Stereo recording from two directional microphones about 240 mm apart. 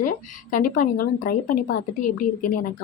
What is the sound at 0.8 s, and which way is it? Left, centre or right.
A woman's voice, left.